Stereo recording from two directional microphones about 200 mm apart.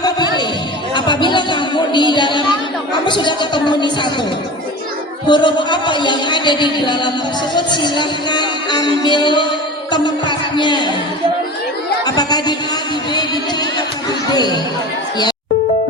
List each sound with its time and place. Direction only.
0.0 s a sound: 20° left (ahead or behind)
0.9 s music: 25° left (ahead or behind)
5.3 s music: 25° left (ahead or behind)
12.0 s music: 20° left (ahead or behind)